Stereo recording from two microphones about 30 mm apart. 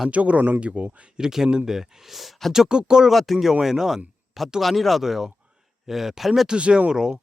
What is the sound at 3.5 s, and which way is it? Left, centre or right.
Speech, centre.